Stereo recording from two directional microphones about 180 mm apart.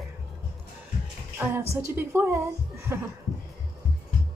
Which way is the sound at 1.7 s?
15° right (ahead or behind).